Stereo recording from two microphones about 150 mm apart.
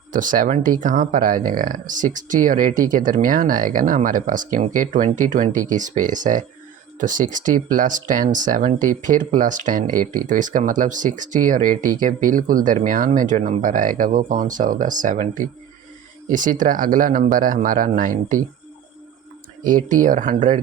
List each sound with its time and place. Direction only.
0.1 s speech: 60° right (ahead or behind)
19.6 s speech: 60° right (ahead or behind)